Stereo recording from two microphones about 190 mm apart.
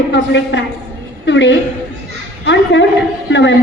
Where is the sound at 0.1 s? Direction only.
70° left (ahead or behind).